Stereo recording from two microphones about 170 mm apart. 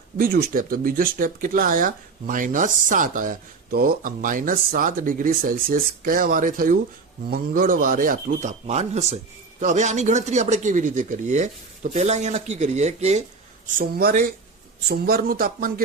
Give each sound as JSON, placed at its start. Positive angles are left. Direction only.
{"t": 0.2, "sound": "speech", "side_deg": -60}
{"t": 13.7, "sound": "speech", "side_deg": -55}